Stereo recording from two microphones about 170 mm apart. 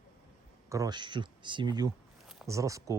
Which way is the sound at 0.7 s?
25° right (ahead or behind).